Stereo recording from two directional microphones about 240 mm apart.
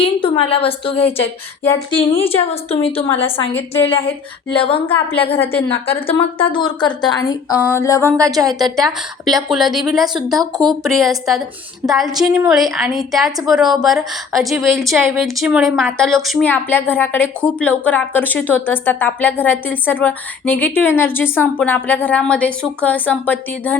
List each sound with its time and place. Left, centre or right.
0.0 s a woman's voice: left
5.4 s a woman's voice: centre
6.1 s a woman's voice: left
8.3 s a woman's voice: centre
8.7 s a woman's voice: centre